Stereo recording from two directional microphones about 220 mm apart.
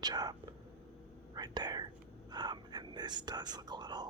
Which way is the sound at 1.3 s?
20° right (ahead or behind).